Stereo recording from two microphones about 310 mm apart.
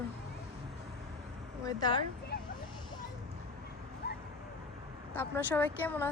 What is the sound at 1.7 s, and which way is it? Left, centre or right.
Speech, centre.